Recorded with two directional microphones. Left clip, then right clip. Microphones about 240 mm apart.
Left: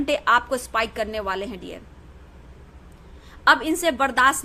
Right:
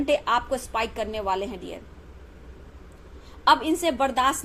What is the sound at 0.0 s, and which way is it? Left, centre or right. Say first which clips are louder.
A woman's voice: left 3 dB; left.